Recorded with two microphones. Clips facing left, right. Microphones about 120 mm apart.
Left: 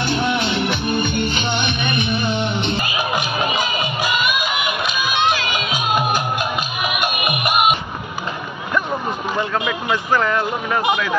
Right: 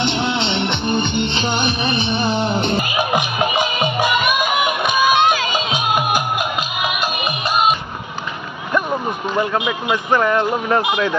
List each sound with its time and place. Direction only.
0.0 s music: 25° right (ahead or behind)
3.8 s music: 55° right (ahead or behind)
5.7 s music: 15° right (ahead or behind)
7.0 s music: 30° right (ahead or behind)
9.4 s speech: 20° right (ahead or behind)